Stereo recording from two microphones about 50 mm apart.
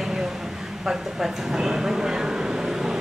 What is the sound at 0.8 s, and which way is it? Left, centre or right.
Speech, centre.